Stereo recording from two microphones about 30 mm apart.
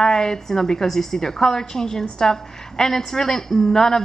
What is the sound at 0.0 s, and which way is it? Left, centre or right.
A woman's voice, left.